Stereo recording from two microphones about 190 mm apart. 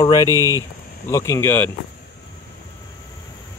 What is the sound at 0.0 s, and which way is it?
Speech, 20° left (ahead or behind).